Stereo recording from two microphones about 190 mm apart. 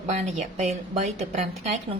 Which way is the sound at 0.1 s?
35° right (ahead or behind).